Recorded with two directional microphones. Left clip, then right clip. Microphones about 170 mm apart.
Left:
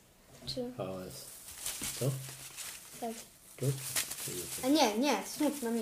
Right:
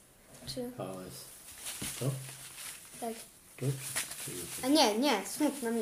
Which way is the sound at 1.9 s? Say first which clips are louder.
Left 2 dB; 30° left (ahead or behind).